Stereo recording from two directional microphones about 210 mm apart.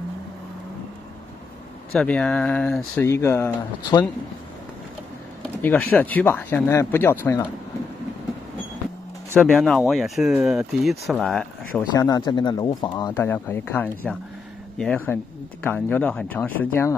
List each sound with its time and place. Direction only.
2.0 s speech: 5° left (ahead or behind)
5.6 s speech: 10° left (ahead or behind)
9.4 s speech: centre (ahead or behind)
11.8 s speech: 20° left (ahead or behind)